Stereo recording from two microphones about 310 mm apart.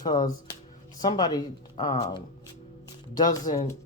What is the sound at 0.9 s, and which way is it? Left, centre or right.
Speech, centre.